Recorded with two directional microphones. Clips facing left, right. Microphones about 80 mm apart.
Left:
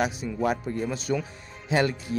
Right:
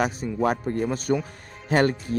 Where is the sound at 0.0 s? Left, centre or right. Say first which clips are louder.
Right 2 dB; right.